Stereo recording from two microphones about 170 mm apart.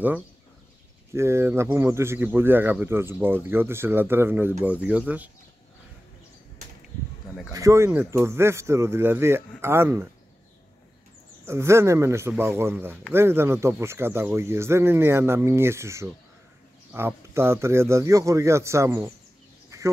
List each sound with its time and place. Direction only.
1.1 s speech: 15° right (ahead or behind)
7.5 s speech: 15° right (ahead or behind)
11.4 s speech: 15° right (ahead or behind)
19.7 s a sound: 15° right (ahead or behind)